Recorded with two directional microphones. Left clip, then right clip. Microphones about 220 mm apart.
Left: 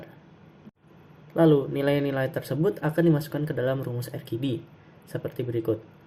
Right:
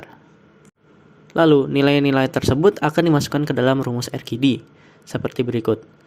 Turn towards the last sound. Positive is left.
turn(degrees=-45)  # may be behind; listen again after turning